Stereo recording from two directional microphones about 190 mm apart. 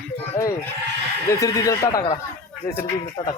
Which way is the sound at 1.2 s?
15° left (ahead or behind).